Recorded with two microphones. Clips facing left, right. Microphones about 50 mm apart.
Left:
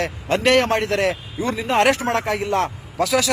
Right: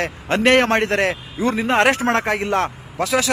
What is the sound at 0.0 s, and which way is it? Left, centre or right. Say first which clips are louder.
A man's voice: right 1 dB; right.